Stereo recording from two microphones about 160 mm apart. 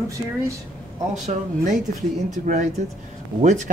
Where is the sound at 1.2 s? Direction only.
50° right (ahead or behind).